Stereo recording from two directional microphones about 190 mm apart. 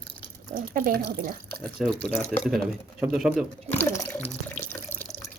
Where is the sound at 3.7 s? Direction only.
15° left (ahead or behind).